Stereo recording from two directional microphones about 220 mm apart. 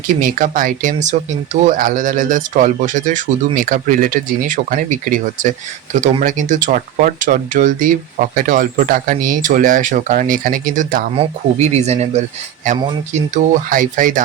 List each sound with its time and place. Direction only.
0.2 s speech: 35° right (ahead or behind)
11.1 s speech: 30° right (ahead or behind)